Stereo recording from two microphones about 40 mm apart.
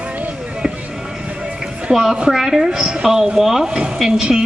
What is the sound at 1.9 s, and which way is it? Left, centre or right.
A woman's voice, centre.